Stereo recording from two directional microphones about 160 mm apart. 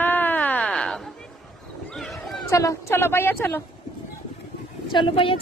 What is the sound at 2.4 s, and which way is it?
Speech, 20° left (ahead or behind).